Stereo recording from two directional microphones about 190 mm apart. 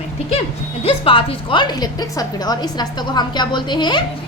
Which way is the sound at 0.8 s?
30° left (ahead or behind).